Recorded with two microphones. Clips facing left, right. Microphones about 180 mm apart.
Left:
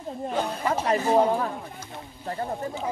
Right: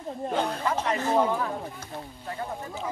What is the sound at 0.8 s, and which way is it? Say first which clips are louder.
Speech: left 4 dB; 35° left (ahead or behind).